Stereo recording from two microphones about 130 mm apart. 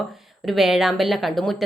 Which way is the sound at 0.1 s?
Centre (ahead or behind).